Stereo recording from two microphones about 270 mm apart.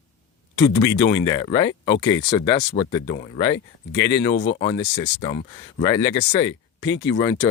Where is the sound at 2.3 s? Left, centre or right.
Centre.